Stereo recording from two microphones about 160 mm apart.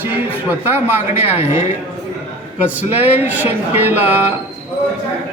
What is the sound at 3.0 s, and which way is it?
A woman's voice, 10° right (ahead or behind).